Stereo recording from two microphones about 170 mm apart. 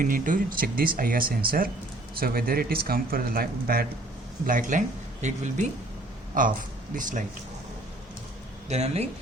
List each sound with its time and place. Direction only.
0.0 s speech: 50° right (ahead or behind)
8.7 s speech: 40° right (ahead or behind)